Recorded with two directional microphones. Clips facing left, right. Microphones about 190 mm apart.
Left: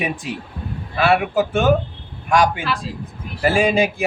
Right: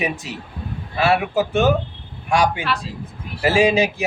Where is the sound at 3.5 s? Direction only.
55° left (ahead or behind).